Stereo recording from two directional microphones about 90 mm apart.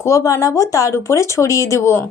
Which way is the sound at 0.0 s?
35° left (ahead or behind).